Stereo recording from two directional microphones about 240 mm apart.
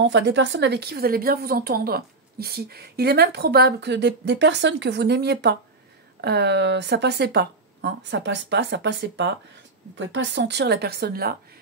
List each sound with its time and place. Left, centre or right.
0.0 s a woman's voice: right